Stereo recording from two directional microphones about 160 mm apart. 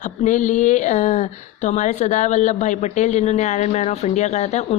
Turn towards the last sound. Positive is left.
turn(degrees=45)  # may be behind; listen again after turning